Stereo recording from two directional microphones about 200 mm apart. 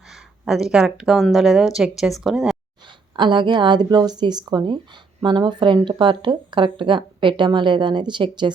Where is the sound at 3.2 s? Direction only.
25° right (ahead or behind).